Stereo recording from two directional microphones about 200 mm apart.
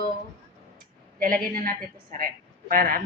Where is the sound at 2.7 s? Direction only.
45° right (ahead or behind).